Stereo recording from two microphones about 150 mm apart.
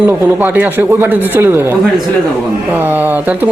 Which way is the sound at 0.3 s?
10° right (ahead or behind).